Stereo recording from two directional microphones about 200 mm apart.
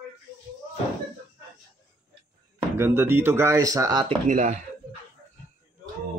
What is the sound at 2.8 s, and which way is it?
Speech, 10° right (ahead or behind).